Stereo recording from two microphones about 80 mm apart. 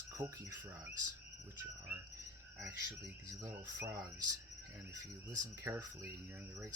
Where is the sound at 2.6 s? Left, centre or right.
Right.